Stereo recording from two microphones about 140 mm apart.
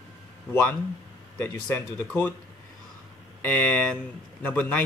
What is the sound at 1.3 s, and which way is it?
Speech, 15° left (ahead or behind).